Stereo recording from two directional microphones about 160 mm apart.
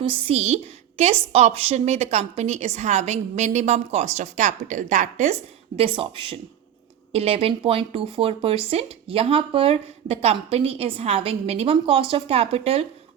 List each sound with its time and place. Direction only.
0.0 s a woman's voice: 35° right (ahead or behind)